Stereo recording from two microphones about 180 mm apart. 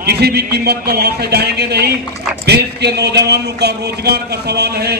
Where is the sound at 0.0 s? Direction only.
65° right (ahead or behind).